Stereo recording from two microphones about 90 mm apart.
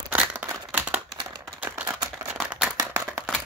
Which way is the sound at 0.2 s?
15° right (ahead or behind).